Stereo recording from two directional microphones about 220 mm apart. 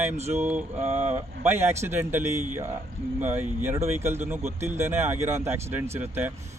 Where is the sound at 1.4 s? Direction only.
10° right (ahead or behind).